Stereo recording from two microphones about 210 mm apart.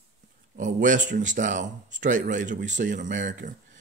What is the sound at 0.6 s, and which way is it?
Speech, 40° right (ahead or behind).